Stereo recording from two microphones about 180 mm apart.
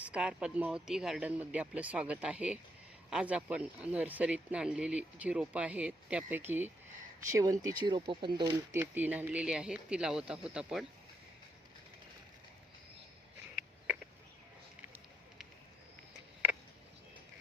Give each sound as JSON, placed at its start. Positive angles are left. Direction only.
{"t": 0.0, "sound": "speech", "side_deg": -5}
{"t": 8.7, "sound": "speech", "side_deg": -10}